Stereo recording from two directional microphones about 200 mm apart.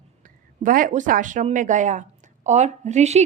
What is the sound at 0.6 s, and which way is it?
A woman's voice, 40° right (ahead or behind).